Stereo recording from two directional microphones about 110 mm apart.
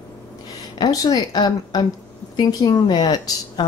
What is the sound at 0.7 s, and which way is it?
Speech, 35° left (ahead or behind).